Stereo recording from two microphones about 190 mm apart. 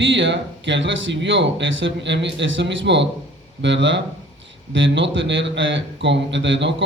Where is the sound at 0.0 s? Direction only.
75° right (ahead or behind).